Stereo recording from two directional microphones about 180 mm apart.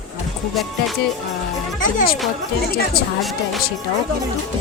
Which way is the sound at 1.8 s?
50° left (ahead or behind).